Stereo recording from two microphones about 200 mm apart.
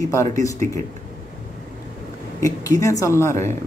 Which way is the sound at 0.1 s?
15° left (ahead or behind).